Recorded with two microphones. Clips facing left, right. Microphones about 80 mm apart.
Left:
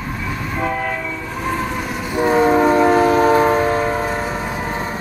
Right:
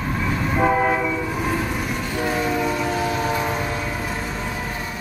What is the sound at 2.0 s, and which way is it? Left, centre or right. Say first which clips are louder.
Train: left 11 dB; left.